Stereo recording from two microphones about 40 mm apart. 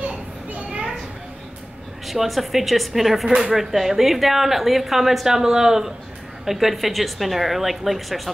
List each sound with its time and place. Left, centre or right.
0.0 s children playing: right
2.0 s speech: centre